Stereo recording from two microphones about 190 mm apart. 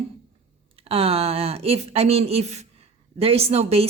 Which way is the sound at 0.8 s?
30° right (ahead or behind).